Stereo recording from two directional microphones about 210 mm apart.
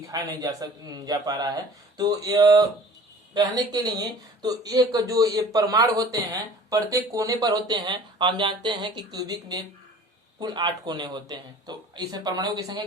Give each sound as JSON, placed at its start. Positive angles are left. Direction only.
{"t": 0.0, "sound": "speech", "side_deg": -15}